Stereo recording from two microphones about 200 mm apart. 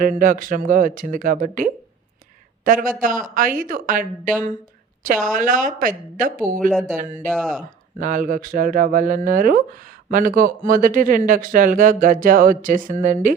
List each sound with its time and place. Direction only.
0.0 s speech: 40° right (ahead or behind)
7.3 s speech: centre (ahead or behind)
7.9 s speech: 40° right (ahead or behind)